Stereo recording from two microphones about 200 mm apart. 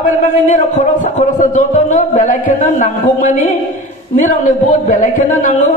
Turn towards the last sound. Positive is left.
turn(degrees=40)  # may be behind; listen again after turning